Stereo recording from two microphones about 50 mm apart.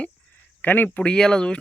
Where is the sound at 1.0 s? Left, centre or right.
Centre.